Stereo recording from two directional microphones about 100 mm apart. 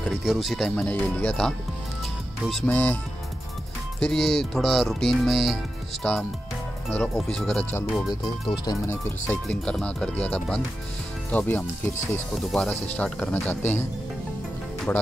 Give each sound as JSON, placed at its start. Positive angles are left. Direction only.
{"t": 0.1, "sound": "speech", "side_deg": -5}
{"t": 2.6, "sound": "speech", "side_deg": 15}
{"t": 4.0, "sound": "speech", "side_deg": 5}
{"t": 6.0, "sound": "speech", "side_deg": 15}
{"t": 8.1, "sound": "speech", "side_deg": 45}
{"t": 8.8, "sound": "speech", "side_deg": 25}
{"t": 9.5, "sound": "speech", "side_deg": 10}
{"t": 12.4, "sound": "speech", "side_deg": 5}
{"t": 14.9, "sound": "speech", "side_deg": 20}